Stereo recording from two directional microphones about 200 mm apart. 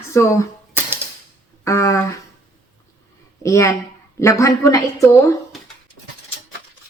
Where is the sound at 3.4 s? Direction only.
15° left (ahead or behind).